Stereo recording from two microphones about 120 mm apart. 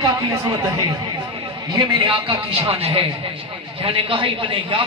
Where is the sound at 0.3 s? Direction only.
30° right (ahead or behind).